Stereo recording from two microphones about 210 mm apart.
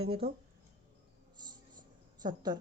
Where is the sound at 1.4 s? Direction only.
20° right (ahead or behind).